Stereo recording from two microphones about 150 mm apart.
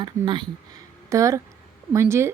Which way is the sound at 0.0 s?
30° right (ahead or behind).